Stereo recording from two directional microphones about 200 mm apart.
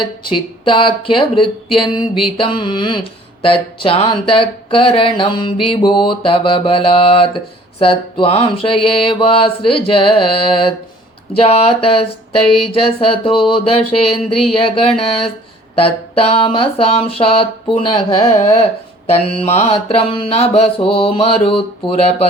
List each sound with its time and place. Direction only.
0.0 s speech: 25° left (ahead or behind)